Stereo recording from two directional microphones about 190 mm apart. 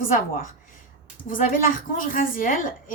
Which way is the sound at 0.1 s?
45° left (ahead or behind).